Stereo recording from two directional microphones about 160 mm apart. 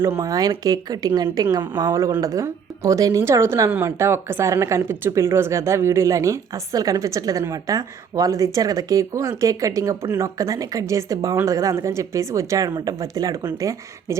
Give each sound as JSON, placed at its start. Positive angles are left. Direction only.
{"t": 0.0, "sound": "speech", "side_deg": -20}